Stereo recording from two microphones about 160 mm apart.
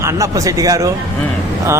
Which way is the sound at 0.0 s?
20° right (ahead or behind).